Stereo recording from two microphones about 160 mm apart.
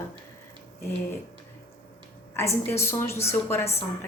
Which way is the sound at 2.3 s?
15° left (ahead or behind).